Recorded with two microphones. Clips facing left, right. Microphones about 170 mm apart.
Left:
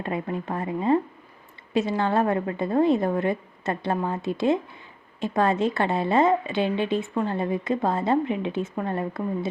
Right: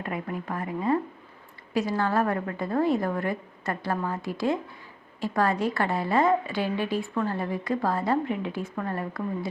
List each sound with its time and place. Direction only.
0.0 s a woman's voice: 25° left (ahead or behind)